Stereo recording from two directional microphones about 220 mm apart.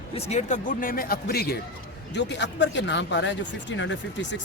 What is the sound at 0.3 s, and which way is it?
Speech, 30° left (ahead or behind).